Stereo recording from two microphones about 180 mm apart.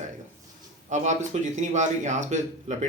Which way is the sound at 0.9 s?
40° right (ahead or behind).